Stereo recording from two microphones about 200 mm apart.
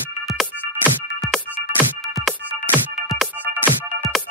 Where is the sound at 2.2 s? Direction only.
Centre (ahead or behind).